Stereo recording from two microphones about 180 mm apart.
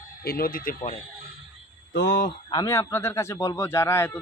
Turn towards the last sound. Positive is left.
turn(degrees=15)  # may be behind; listen again after turning